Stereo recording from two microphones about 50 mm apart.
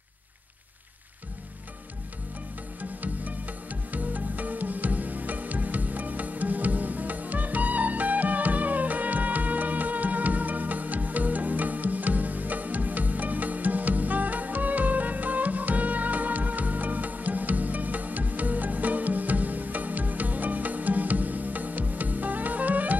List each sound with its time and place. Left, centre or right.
2.8 s music: right